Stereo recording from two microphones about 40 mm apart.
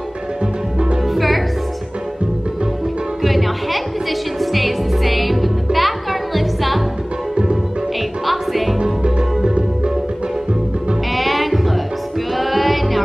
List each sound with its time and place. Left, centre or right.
1.1 s music: centre
3.2 s music: centre
8.3 s music: centre
8.7 s music: right
11.1 s music: centre